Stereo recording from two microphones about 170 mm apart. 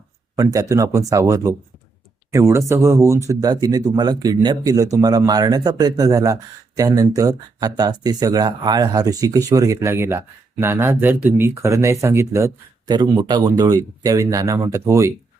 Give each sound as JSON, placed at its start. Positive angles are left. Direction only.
{"t": 0.3, "sound": "speech", "side_deg": -20}